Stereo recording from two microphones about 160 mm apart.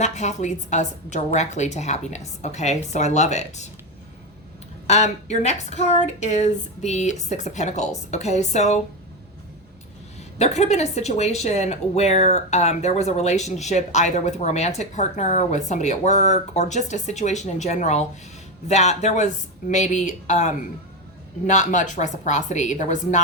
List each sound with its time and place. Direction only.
0.0 s speech: 45° left (ahead or behind)
4.9 s speech: 45° left (ahead or behind)
10.3 s speech: 45° left (ahead or behind)